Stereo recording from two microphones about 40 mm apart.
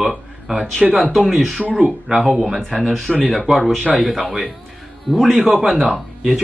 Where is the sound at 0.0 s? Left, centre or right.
Centre.